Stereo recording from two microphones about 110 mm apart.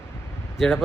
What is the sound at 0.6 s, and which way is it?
Speech, centre (ahead or behind).